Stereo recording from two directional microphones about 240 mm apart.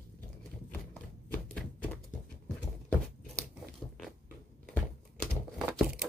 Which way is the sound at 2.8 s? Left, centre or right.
Centre.